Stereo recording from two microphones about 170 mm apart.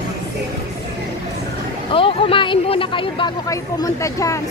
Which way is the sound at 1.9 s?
30° left (ahead or behind).